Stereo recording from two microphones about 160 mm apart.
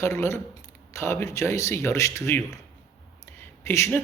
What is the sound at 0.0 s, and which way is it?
Speech, 15° left (ahead or behind).